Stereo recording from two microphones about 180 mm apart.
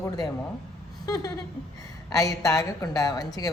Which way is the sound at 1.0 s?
20° left (ahead or behind).